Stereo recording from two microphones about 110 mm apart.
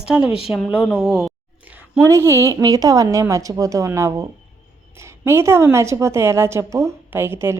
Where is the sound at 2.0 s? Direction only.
25° right (ahead or behind).